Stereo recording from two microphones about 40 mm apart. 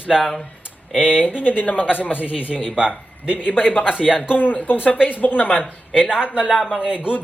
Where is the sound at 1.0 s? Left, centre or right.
Left.